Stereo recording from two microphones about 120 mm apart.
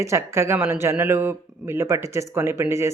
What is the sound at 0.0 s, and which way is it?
Speech, 25° right (ahead or behind).